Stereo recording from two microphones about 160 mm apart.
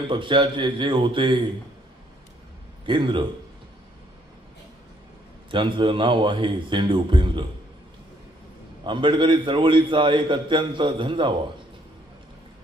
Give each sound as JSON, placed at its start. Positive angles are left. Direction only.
{"t": 0.1, "sound": "a man's voice", "side_deg": -30}
{"t": 2.8, "sound": "a man's voice", "side_deg": -30}
{"t": 5.5, "sound": "a man's voice", "side_deg": -30}
{"t": 8.8, "sound": "a man's voice", "side_deg": -30}